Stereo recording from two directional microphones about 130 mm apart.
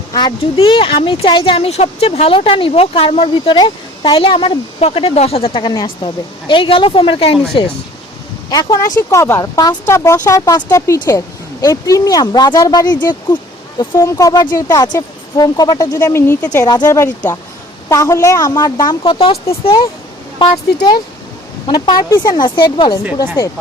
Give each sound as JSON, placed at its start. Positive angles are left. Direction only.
{"t": 0.1, "sound": "speech", "side_deg": 35}
{"t": 3.3, "sound": "speech", "side_deg": 35}
{"t": 7.6, "sound": "speech", "side_deg": 35}
{"t": 9.0, "sound": "speech", "side_deg": 20}
{"t": 16.5, "sound": "speech", "side_deg": 30}
{"t": 21.7, "sound": "speech", "side_deg": 35}